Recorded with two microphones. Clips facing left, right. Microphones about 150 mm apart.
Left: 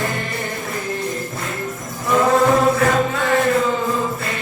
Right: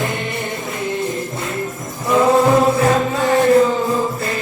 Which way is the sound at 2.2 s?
30° right (ahead or behind).